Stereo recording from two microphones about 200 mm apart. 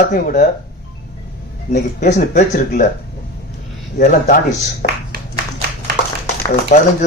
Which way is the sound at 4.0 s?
40° left (ahead or behind).